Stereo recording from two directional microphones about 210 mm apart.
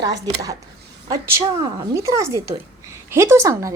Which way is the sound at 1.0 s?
15° right (ahead or behind).